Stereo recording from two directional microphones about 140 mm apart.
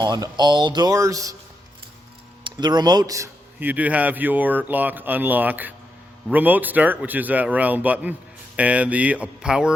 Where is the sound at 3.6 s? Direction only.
10° right (ahead or behind).